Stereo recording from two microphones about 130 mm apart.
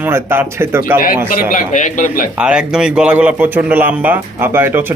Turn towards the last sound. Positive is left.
turn(degrees=-15)  # may be behind; listen again after turning